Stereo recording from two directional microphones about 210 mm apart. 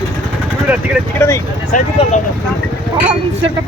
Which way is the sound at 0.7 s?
5° right (ahead or behind).